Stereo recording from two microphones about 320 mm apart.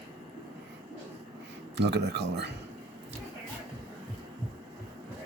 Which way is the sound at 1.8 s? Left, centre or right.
Right.